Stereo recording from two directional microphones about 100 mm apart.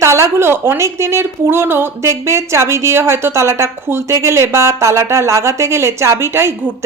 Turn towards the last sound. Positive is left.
turn(degrees=-25)  # may be behind; listen again after turning